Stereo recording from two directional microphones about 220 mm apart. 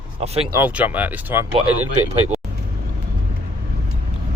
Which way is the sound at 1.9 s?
30° right (ahead or behind).